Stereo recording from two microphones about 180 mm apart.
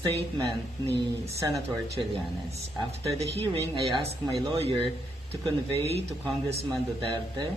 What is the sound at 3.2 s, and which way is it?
Speech, 30° right (ahead or behind).